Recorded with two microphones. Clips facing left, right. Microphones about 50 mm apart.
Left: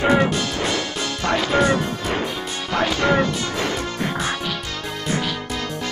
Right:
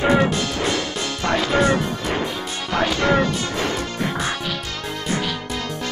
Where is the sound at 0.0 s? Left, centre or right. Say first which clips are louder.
Even; centre.